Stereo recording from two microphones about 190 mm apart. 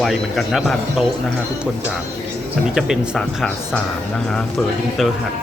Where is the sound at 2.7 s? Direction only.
5° right (ahead or behind).